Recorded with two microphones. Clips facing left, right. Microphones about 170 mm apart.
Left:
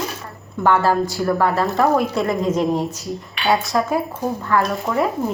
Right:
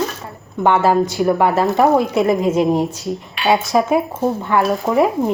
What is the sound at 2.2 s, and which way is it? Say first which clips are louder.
A woman's voice: right 4 dB; 5° right (ahead or behind).